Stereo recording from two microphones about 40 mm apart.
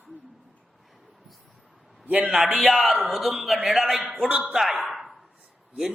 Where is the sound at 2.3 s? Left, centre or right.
Centre.